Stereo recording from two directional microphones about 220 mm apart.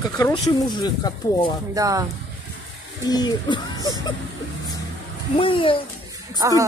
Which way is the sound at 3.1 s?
20° left (ahead or behind).